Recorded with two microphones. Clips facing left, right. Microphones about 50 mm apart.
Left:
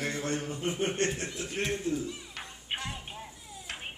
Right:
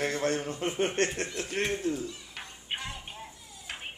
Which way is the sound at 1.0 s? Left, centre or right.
Right.